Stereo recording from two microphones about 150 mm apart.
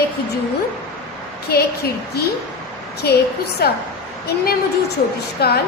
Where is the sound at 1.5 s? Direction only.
90° left.